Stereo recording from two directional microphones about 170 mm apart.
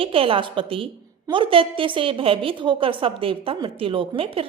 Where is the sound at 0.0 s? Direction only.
30° right (ahead or behind).